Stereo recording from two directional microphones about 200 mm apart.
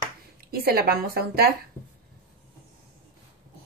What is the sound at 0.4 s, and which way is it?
A woman's voice, 50° right (ahead or behind).